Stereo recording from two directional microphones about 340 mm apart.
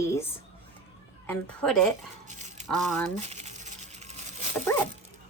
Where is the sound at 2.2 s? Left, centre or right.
Right.